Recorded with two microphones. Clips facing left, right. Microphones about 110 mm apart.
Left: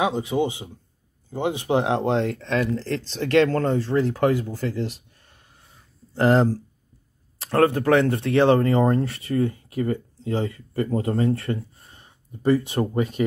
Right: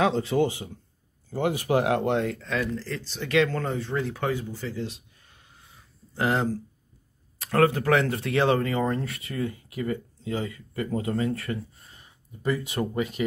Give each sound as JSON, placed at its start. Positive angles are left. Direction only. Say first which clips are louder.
{"t": 0.0, "sound": "a man's voice", "louder": "even", "side_deg": 15}
{"t": 2.4, "sound": "speech", "louder": "left 5 dB", "side_deg": 60}
{"t": 2.9, "sound": "speech", "louder": "left 7 dB", "side_deg": 90}
{"t": 3.4, "sound": "speech", "louder": "left 7 dB", "side_deg": 50}
{"t": 4.0, "sound": "speech", "louder": "left 7 dB", "side_deg": 40}
{"t": 6.1, "sound": "speech", "louder": "left 7 dB", "side_deg": 40}